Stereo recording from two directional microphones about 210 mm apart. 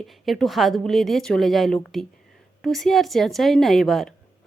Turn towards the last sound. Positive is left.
turn(degrees=0)  # may be behind; listen again after turning